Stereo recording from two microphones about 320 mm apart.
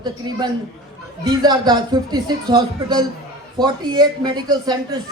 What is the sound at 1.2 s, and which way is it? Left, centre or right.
A man's voice, centre.